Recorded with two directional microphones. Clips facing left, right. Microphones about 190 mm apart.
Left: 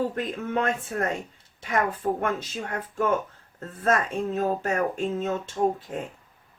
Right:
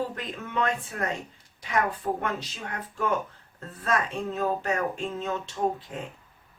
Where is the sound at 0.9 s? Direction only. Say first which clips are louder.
Left 4 dB; 45° left (ahead or behind).